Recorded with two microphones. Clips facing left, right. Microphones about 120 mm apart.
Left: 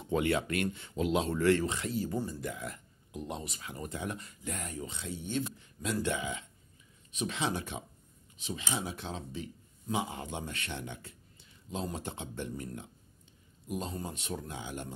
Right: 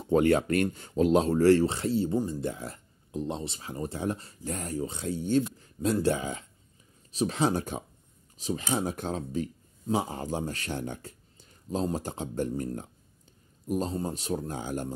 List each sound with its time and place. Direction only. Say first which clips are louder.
0.0 s speech: right 7 dB; 40° right (ahead or behind)
2.1 s speech: right 6 dB; 15° right (ahead or behind)
2.4 s speech: right 5 dB; 30° right (ahead or behind)